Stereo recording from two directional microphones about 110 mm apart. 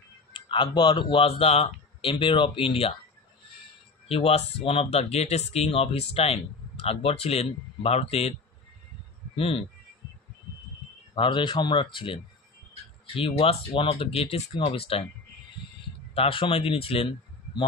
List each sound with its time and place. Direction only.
0.3 s speech: 50° left (ahead or behind)
4.1 s speech: 65° left (ahead or behind)
9.3 s speech: 60° left (ahead or behind)
11.1 s speech: 50° left (ahead or behind)
16.2 s speech: 55° left (ahead or behind)